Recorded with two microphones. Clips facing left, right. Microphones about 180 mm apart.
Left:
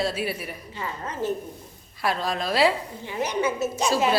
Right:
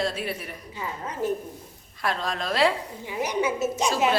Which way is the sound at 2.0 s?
5° left (ahead or behind).